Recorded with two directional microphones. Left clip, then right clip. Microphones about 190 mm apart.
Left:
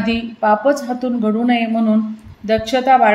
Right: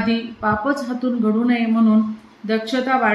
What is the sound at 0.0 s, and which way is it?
A woman's voice, 45° left (ahead or behind).